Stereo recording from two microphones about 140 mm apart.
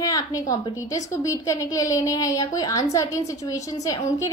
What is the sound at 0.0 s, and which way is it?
A woman's voice, 25° left (ahead or behind).